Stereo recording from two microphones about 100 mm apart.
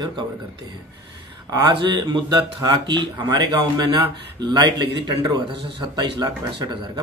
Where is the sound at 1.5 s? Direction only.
50° right (ahead or behind).